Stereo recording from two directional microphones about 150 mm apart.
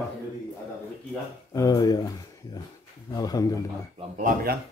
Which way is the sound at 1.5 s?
25° left (ahead or behind).